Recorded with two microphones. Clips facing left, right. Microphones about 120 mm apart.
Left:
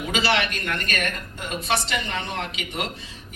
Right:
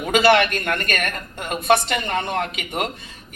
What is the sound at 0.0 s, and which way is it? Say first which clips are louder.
A man's voice: right 8 dB; 50° right (ahead or behind).